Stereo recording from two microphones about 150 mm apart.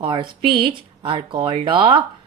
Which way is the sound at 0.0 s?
35° right (ahead or behind).